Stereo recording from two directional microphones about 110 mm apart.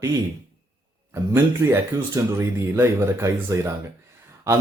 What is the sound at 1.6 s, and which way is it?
Speech, 35° right (ahead or behind).